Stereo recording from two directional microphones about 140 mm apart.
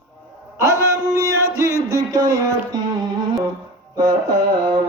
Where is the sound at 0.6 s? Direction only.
20° right (ahead or behind).